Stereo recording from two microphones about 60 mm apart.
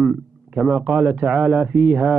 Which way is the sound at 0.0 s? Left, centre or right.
Centre.